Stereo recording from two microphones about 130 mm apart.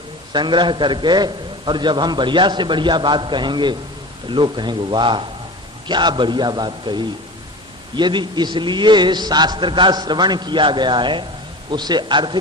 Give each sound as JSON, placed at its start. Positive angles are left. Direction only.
{"t": 0.3, "sound": "a man's voice", "side_deg": -35}